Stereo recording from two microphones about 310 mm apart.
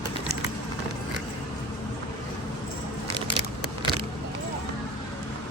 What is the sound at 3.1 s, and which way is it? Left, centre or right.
Vehicle, centre.